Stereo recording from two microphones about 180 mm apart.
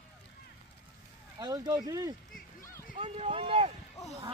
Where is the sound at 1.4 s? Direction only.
20° right (ahead or behind).